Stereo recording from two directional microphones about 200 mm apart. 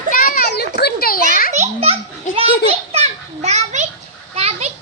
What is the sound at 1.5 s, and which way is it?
Children playing, 35° right (ahead or behind).